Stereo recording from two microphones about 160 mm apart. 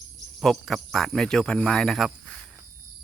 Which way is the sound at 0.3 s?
Centre (ahead or behind).